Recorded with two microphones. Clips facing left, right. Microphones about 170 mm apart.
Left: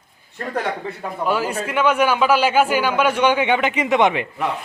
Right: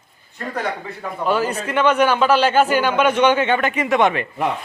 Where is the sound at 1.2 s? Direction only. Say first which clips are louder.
Right 1 dB; 10° left (ahead or behind).